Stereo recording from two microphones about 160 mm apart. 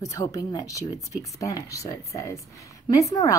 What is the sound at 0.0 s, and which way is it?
A woman's voice, 20° left (ahead or behind).